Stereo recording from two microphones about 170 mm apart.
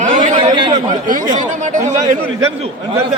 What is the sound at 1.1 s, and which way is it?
Speech, 50° right (ahead or behind).